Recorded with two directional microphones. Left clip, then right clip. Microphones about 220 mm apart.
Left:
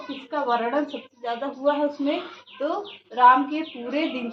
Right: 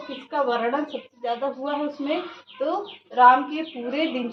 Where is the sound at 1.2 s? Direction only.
15° left (ahead or behind).